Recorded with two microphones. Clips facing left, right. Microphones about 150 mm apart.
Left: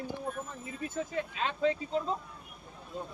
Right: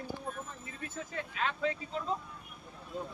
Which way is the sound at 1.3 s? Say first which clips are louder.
Left 3 dB; 25° left (ahead or behind).